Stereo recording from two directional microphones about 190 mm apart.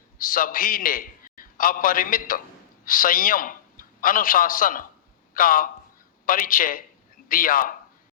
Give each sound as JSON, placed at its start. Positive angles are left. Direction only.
{"t": 0.2, "sound": "a man's voice", "side_deg": 45}